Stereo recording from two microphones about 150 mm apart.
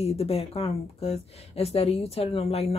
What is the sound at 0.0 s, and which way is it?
A woman's voice, 40° left (ahead or behind).